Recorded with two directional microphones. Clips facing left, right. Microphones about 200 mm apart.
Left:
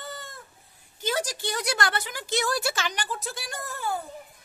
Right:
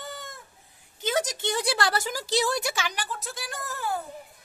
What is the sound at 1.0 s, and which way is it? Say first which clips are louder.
Speech: right 2 dB; 20° right (ahead or behind).